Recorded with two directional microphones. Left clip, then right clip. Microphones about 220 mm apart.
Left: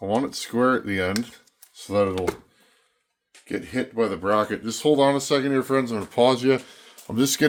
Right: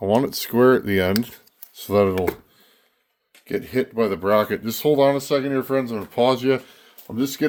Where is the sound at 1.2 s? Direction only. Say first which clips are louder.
Right 4 dB; 50° right (ahead or behind).